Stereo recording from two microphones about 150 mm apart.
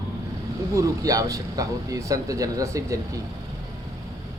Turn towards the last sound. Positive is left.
turn(degrees=-20)  # may be behind; listen again after turning